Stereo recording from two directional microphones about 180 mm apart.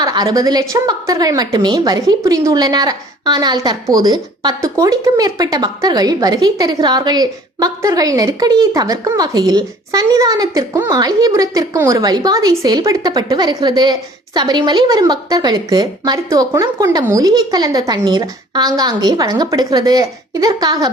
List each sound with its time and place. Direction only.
0.0 s a woman's voice: 20° right (ahead or behind)